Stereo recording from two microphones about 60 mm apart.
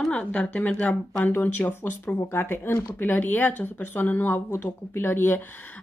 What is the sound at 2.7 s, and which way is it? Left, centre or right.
Speech, left.